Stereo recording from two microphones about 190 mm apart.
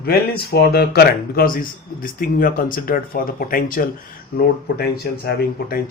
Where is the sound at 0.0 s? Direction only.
55° left (ahead or behind).